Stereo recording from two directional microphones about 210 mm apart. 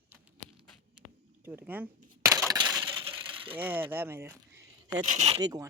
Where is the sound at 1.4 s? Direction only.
10° right (ahead or behind).